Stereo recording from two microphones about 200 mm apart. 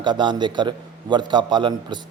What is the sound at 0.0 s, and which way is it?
Speech, 20° right (ahead or behind).